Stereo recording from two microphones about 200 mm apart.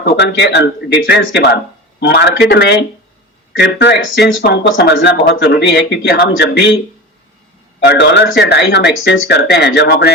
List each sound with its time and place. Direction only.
0.0 s speech: 60° left (ahead or behind)
7.9 s speech: 60° left (ahead or behind)